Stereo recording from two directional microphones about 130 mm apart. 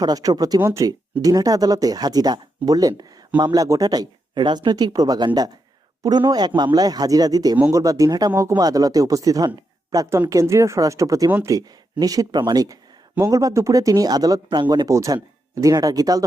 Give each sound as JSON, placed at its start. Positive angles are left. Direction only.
{"t": 0.0, "sound": "speech", "side_deg": -30}